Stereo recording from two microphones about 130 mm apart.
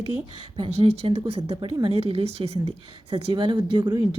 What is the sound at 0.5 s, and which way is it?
Speech, 45° right (ahead or behind).